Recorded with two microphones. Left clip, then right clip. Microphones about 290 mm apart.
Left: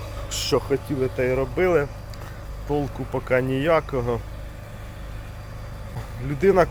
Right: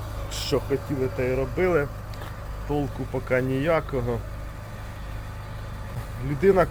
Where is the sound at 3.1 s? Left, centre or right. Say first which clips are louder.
Left 3 dB; centre.